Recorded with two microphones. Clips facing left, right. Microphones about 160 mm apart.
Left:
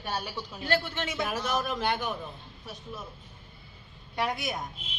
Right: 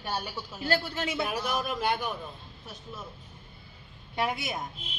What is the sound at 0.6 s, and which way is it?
Speech, 35° right (ahead or behind).